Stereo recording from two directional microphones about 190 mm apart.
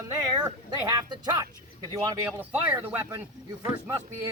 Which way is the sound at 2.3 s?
10° right (ahead or behind).